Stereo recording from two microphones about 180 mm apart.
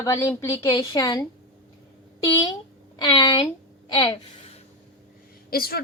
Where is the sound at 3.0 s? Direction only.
25° left (ahead or behind).